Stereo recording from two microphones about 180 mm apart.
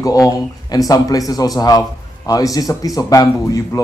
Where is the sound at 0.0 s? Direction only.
20° left (ahead or behind).